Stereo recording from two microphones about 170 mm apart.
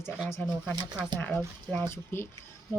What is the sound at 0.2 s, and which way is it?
A woman's voice, 15° left (ahead or behind).